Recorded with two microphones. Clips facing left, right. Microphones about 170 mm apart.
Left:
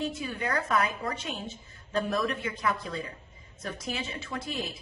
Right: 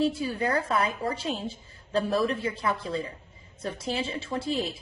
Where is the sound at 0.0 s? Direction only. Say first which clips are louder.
Right 6 dB; 30° right (ahead or behind).